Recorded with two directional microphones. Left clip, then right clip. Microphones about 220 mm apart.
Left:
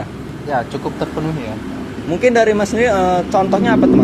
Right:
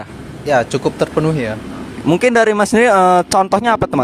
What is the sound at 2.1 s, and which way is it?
Speech, 45° right (ahead or behind).